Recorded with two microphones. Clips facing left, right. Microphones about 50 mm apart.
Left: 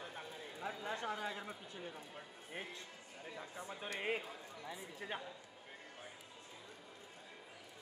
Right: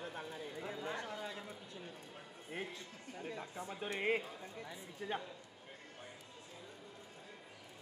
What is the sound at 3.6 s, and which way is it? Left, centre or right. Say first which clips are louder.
Speech: right 3 dB; centre.